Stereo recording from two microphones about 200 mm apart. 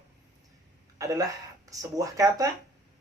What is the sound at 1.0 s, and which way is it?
Speech, 15° right (ahead or behind).